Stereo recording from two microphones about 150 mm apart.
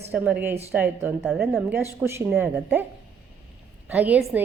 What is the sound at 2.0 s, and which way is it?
Speech, 15° right (ahead or behind).